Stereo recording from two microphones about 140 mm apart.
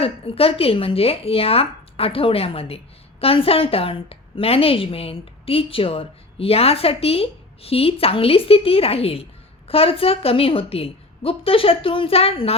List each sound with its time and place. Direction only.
0.0 s speech: 45° left (ahead or behind)